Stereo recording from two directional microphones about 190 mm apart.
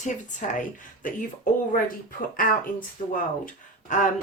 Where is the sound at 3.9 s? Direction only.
40° left (ahead or behind).